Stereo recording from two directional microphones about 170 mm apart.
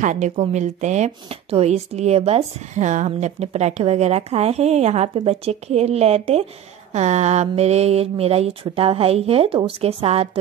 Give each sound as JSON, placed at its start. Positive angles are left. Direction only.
{"t": 0.0, "sound": "speech", "side_deg": -45}